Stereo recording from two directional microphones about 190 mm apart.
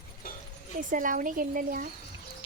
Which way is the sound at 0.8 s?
45° right (ahead or behind).